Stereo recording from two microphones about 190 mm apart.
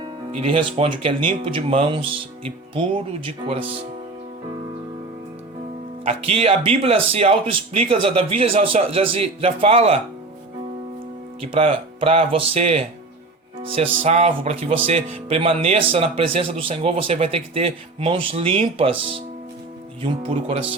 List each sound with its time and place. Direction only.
0.3 s speech: 30° right (ahead or behind)
6.1 s speech: 30° right (ahead or behind)
11.5 s speech: 30° right (ahead or behind)